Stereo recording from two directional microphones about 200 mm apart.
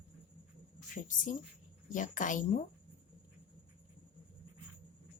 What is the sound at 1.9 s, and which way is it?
Speech, 40° left (ahead or behind).